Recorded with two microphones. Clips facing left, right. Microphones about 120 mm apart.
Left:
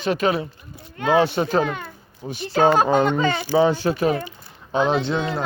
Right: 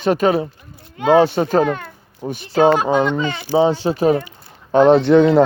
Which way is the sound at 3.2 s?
35° left (ahead or behind).